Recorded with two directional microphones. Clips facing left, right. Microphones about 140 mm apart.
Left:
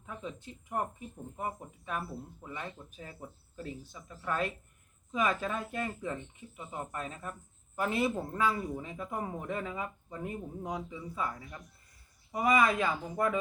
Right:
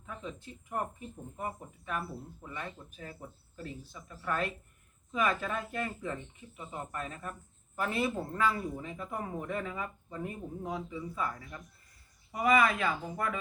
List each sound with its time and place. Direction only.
0.0 s speech: 20° left (ahead or behind)